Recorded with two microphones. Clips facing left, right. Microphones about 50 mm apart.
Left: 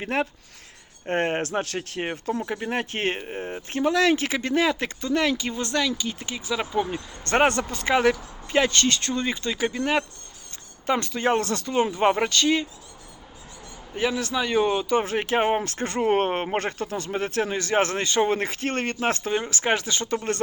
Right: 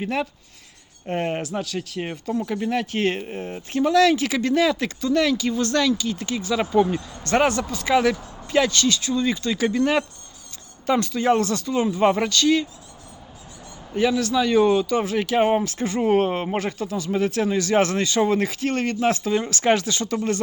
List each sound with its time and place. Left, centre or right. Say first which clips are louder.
0.0 s speech: right 1 dB; left
2.3 s speech: right 5 dB; left
3.2 s speech: right 1 dB; centre
6.5 s speech: right 6 dB; centre
7.3 s speech: right 1 dB; left
9.2 s speech: right 4 dB; left
9.6 s speech: right 4 dB; centre
10.8 s speech: right 3 dB; left
12.0 s speech: right 4 dB; left
13.9 s speech: right 5 dB; centre
14.9 s speech: right 2 dB; left
15.6 s speech: right 2 dB; left
19.4 s speech: right 4 dB; left